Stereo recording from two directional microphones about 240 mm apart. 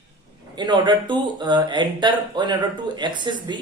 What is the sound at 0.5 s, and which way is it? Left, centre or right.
Speech, centre.